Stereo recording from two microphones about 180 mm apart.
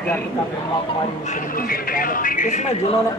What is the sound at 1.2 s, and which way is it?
Speech, 50° left (ahead or behind).